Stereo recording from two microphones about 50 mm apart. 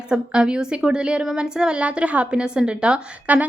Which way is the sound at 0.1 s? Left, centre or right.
Centre.